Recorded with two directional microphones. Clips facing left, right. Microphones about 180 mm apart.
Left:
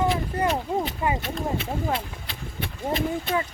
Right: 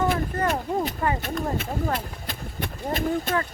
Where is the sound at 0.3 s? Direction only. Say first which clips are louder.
Left 1 dB; 10° left (ahead or behind).